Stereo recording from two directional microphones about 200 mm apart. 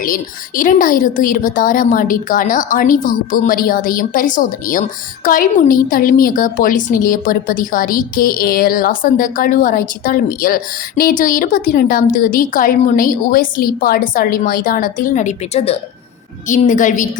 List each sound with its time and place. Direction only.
0.0 s a woman's voice: 45° left (ahead or behind)